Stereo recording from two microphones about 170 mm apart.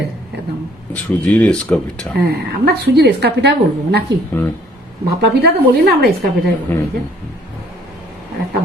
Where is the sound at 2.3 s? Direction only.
70° right (ahead or behind).